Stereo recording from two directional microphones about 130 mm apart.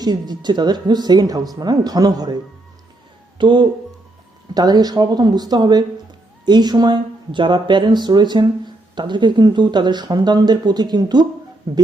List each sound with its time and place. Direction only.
0.0 s speech: 35° right (ahead or behind)